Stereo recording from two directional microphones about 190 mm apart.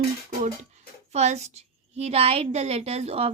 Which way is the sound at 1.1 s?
35° right (ahead or behind).